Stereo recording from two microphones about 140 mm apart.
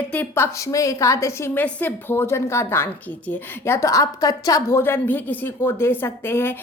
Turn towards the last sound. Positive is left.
turn(degrees=15)  # may be behind; listen again after turning